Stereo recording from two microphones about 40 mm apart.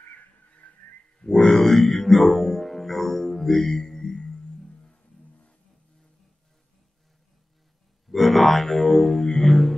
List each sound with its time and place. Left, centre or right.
0.6 s a sound: left
1.3 s music: centre
8.1 s music: centre